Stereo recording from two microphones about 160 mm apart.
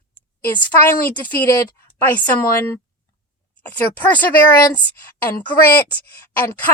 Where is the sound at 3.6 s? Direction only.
10° left (ahead or behind).